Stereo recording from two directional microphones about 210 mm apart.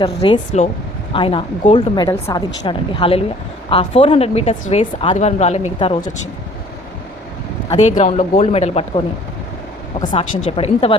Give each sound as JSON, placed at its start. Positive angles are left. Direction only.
{"t": 0.0, "sound": "speech", "side_deg": 25}
{"t": 7.8, "sound": "speech", "side_deg": 35}